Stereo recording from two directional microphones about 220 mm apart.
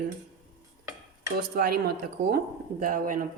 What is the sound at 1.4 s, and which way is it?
A woman's voice, 45° right (ahead or behind).